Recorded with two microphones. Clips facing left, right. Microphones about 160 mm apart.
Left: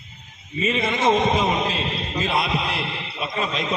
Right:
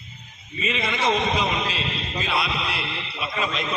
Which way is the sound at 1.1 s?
45° left (ahead or behind).